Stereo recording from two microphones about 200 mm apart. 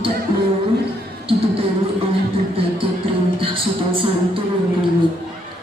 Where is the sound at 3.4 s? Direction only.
25° right (ahead or behind).